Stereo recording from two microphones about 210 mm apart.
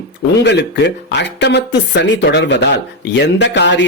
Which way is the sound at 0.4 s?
55° left (ahead or behind).